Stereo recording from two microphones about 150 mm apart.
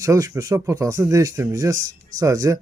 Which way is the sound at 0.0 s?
20° right (ahead or behind).